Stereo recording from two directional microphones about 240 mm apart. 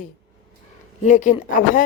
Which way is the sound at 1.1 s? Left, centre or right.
Left.